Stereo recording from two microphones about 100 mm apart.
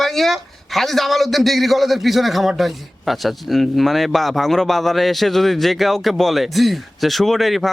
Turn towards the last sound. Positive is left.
turn(degrees=0)  # may be behind; listen again after turning